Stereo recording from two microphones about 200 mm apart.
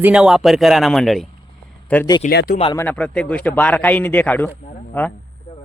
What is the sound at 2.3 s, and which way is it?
Speech, 55° left (ahead or behind).